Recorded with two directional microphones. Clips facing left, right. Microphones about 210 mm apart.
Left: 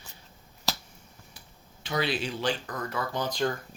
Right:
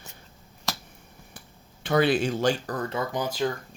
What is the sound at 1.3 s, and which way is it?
Speech, 50° right (ahead or behind).